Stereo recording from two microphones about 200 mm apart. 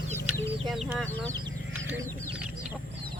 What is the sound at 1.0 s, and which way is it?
Speech, 10° left (ahead or behind).